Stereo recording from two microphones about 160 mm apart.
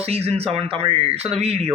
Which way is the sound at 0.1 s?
40° right (ahead or behind).